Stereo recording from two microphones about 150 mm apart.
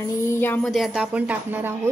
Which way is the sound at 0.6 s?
Centre (ahead or behind).